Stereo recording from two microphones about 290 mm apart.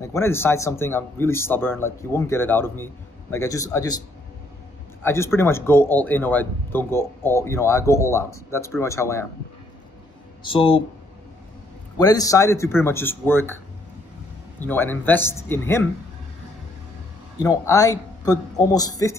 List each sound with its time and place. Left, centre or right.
0.0 s speech: centre
5.0 s speech: centre
10.4 s speech: centre
12.0 s speech: centre
14.6 s speech: centre
17.4 s speech: centre